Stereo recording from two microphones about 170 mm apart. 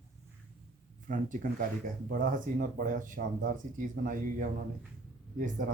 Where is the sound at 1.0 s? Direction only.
50° right (ahead or behind).